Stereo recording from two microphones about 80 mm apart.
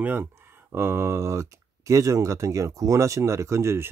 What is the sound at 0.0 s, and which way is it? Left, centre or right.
Speech, right.